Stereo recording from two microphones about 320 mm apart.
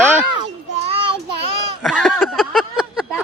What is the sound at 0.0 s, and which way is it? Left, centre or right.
Children playing, centre.